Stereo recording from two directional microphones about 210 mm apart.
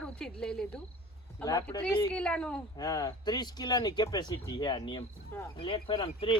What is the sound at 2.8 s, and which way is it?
Speech, 15° left (ahead or behind).